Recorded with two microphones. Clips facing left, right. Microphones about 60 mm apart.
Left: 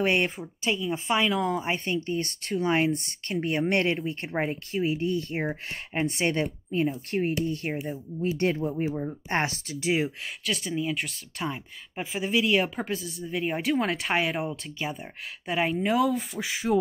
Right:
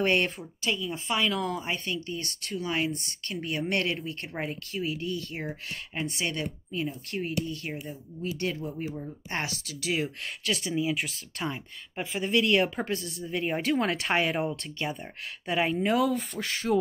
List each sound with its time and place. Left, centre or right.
0.0 s speech: centre
0.7 s speech: left
1.6 s speech: left
10.2 s speech: centre